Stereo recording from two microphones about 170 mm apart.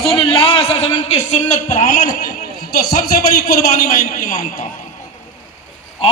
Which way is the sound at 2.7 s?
65° left (ahead or behind).